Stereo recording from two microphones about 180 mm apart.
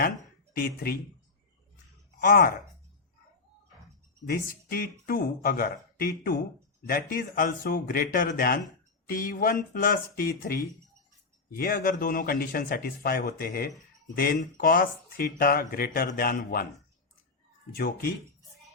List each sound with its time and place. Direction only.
0.5 s speech: 55° left (ahead or behind)
2.2 s speech: 55° left (ahead or behind)
4.3 s speech: 55° left (ahead or behind)
17.7 s speech: 55° left (ahead or behind)